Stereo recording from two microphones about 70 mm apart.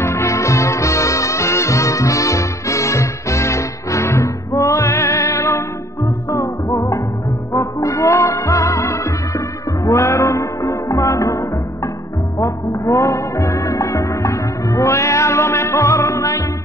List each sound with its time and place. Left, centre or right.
0.0 s music: left